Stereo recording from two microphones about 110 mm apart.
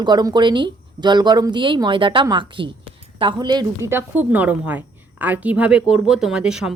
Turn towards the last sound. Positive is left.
turn(degrees=-5)  # may be behind; listen again after turning